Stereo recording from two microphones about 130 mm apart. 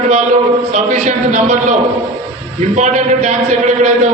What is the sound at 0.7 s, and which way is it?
A man's voice, 70° right (ahead or behind).